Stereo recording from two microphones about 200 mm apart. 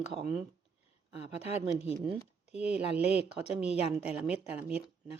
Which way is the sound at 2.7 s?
5° right (ahead or behind).